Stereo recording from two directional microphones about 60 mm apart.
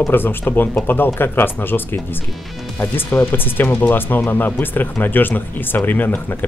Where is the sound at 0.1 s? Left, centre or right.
Left.